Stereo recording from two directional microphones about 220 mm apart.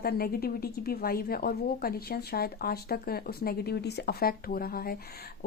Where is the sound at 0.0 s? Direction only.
45° left (ahead or behind).